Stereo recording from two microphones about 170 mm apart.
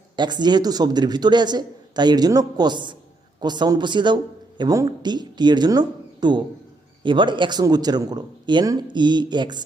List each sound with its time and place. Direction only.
0.2 s speech: 25° right (ahead or behind)